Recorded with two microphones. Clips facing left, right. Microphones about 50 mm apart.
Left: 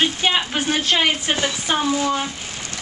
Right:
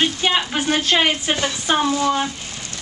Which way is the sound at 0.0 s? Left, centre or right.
Centre.